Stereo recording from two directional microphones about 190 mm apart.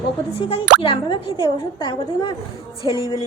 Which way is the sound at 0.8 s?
25° left (ahead or behind).